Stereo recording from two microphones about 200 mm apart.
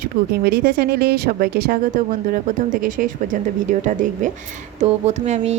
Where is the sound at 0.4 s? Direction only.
50° right (ahead or behind).